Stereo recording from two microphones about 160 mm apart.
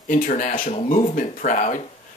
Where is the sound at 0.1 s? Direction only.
55° left (ahead or behind).